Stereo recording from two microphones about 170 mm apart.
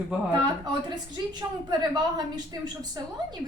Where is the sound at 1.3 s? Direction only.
25° right (ahead or behind).